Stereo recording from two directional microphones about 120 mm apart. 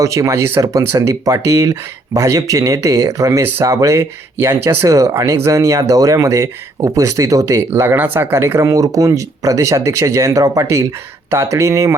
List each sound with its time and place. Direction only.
0.0 s speech: 25° right (ahead or behind)